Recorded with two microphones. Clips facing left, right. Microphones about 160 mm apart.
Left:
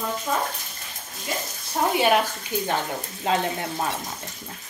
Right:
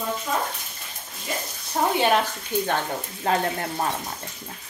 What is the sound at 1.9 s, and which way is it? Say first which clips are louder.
Speech: left 1 dB; 10° left (ahead or behind).